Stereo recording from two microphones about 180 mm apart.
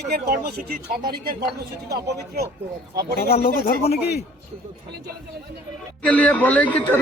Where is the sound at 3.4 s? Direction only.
35° left (ahead or behind).